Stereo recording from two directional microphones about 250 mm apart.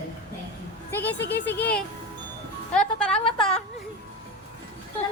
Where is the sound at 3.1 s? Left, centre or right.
Left.